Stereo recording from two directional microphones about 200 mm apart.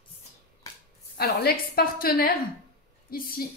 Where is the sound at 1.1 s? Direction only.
50° left (ahead or behind).